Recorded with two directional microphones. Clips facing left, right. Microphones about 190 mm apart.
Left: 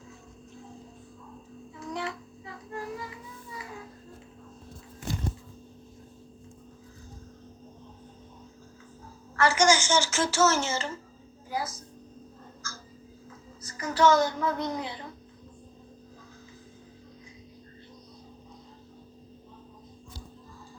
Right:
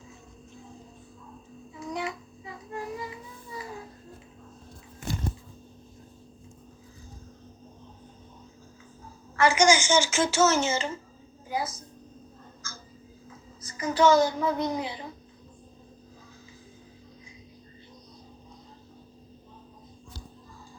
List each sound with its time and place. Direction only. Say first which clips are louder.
1.7 s child singing: right 2 dB; 15° right (ahead or behind)
3.5 s child singing: right 4 dB; 35° right (ahead or behind)
9.3 s a woman's voice: right 2 dB; 20° right (ahead or behind)
11.4 s a sound: right 2 dB; 20° right (ahead or behind)
13.6 s a child's voice: right 1 dB; 20° right (ahead or behind)